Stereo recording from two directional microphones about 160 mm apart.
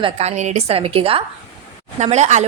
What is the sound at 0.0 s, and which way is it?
A woman's voice, 40° right (ahead or behind).